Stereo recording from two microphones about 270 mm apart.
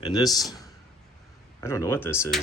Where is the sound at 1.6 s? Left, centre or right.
Centre.